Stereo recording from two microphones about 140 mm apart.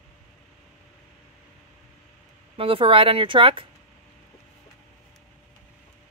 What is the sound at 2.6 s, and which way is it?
Speech, 40° right (ahead or behind).